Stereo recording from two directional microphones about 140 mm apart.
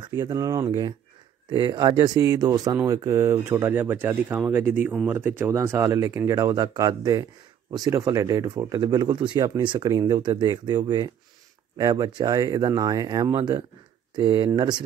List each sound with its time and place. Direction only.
0.0 s speech: 30° right (ahead or behind)